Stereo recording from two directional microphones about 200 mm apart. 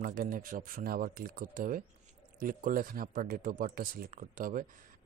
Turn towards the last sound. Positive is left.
turn(degrees=-45)  # may be behind; listen again after turning